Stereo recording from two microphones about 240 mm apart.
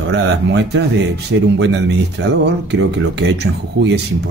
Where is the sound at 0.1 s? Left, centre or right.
Right.